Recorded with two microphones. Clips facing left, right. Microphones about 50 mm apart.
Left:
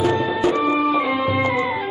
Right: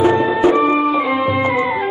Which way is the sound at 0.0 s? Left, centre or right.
Right.